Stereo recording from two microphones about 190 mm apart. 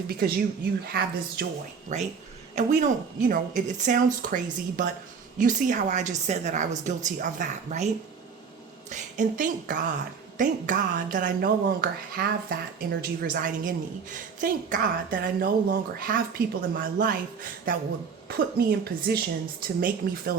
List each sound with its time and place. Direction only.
0.1 s a woman's voice: 55° right (ahead or behind)
1.9 s a woman's voice: 40° right (ahead or behind)